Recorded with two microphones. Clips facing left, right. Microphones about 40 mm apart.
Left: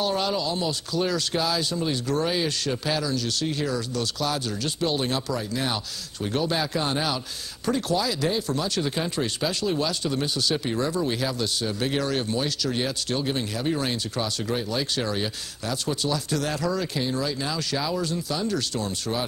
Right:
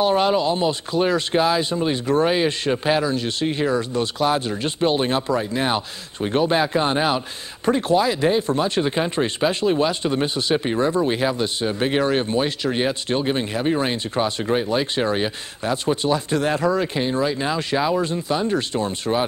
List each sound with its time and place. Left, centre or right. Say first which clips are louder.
0.0 s speech: right 7 dB; right